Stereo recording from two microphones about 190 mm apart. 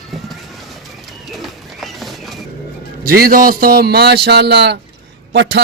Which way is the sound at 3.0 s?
50° right (ahead or behind).